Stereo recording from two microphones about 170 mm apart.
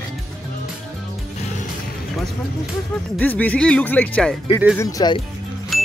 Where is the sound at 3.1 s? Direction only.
10° left (ahead or behind).